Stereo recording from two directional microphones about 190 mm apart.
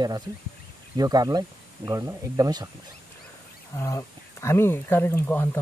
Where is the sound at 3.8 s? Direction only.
15° left (ahead or behind).